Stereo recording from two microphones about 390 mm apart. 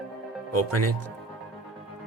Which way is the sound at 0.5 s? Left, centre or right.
Right.